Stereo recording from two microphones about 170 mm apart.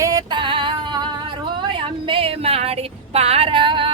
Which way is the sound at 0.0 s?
20° right (ahead or behind).